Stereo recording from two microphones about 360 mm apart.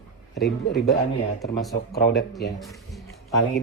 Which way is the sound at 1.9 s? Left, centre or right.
Left.